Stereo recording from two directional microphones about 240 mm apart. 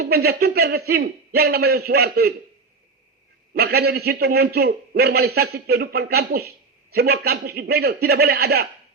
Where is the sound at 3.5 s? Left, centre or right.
Right.